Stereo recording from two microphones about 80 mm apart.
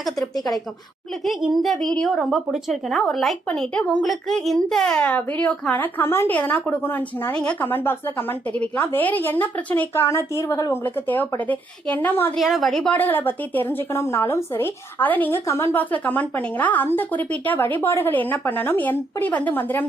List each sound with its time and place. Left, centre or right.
1.2 s a woman's voice: centre; by 7.3 s left
7.3 s a woman's voice: centre
7.7 s speech: left
9.9 s speech: left
10.8 s speech: left
12.4 s a woman's voice: centre
12.9 s speech: left
15.3 s speech: left
15.7 s speech: left